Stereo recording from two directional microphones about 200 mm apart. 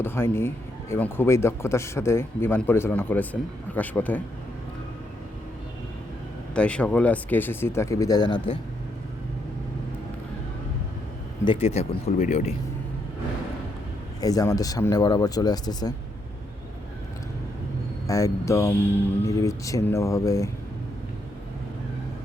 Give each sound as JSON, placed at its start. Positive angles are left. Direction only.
{"t": 0.0, "sound": "speech", "side_deg": 10}
{"t": 6.5, "sound": "speech", "side_deg": 5}
{"t": 11.4, "sound": "speech", "side_deg": 30}
{"t": 14.2, "sound": "speech", "side_deg": 20}
{"t": 18.1, "sound": "speech", "side_deg": 15}